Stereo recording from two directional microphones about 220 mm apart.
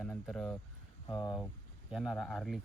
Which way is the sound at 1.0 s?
15° left (ahead or behind).